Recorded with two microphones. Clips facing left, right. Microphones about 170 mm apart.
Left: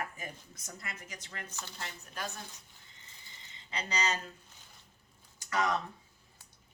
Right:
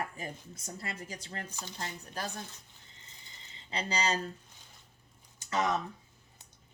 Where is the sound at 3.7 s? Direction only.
30° right (ahead or behind).